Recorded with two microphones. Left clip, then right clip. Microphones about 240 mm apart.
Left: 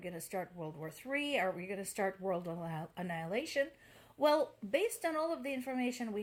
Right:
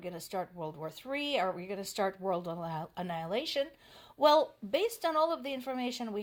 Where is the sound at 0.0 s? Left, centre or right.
Right.